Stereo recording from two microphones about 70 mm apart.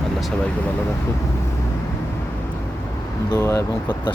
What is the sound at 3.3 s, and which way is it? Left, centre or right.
Speech, left.